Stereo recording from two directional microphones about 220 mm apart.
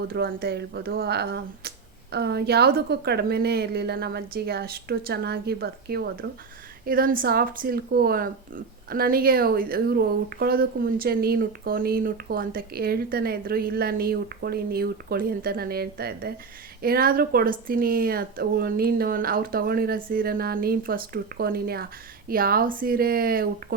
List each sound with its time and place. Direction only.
0.1 s speech: 45° right (ahead or behind)